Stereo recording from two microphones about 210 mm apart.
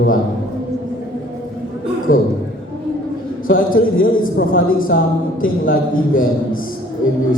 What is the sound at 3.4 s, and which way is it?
A man's voice, 40° left (ahead or behind).